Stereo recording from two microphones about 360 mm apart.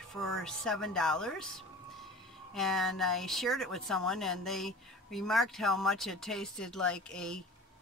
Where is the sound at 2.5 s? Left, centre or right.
Centre.